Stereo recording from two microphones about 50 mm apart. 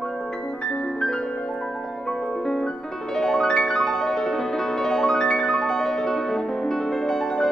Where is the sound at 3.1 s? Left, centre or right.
Centre.